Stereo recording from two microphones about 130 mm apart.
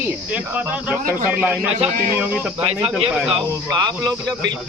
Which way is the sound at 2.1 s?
10° right (ahead or behind).